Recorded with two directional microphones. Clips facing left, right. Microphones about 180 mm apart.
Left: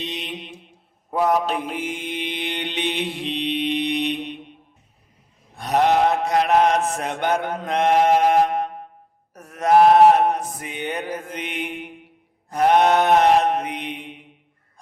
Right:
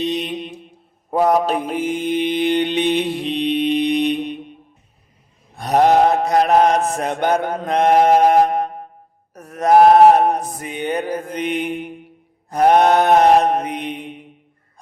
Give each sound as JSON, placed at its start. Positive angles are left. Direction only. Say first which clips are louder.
{"t": 0.0, "sound": "mantra", "louder": "right 9 dB", "side_deg": -40}
{"t": 5.5, "sound": "mantra", "louder": "right 4 dB", "side_deg": -40}
{"t": 9.3, "sound": "a sound", "louder": "right 3 dB", "side_deg": -40}
{"t": 12.5, "sound": "mantra", "louder": "right 3 dB", "side_deg": -40}